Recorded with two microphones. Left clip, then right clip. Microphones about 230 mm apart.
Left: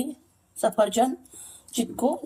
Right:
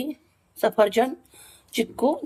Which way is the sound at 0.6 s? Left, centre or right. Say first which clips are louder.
Right 2 dB; right.